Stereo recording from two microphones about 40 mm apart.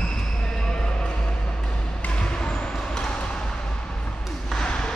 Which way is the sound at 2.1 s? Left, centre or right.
Left.